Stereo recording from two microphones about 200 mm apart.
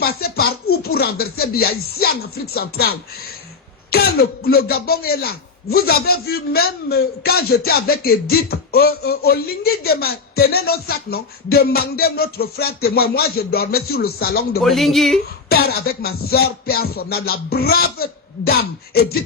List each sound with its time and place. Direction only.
0.0 s a sound: 50° left (ahead or behind)
0.8 s speech: 50° left (ahead or behind)
3.9 s speech: 50° left (ahead or behind)
14.6 s speech: centre (ahead or behind)
15.4 s speech: 50° left (ahead or behind)